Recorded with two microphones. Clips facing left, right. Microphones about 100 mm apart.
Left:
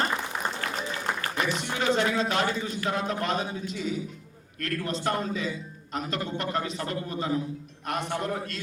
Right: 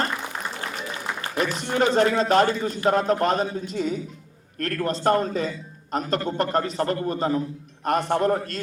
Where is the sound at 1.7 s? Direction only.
45° right (ahead or behind).